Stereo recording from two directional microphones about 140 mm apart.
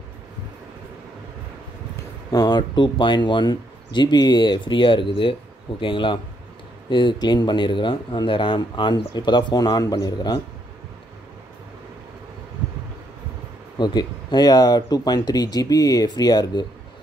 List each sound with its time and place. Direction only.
2.3 s speech: 30° left (ahead or behind)
13.7 s speech: 30° left (ahead or behind)